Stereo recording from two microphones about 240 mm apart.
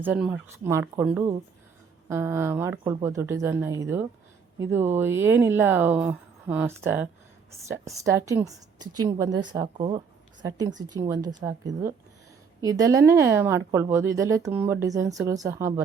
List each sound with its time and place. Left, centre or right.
0.0 s speech: centre
12.6 s speech: centre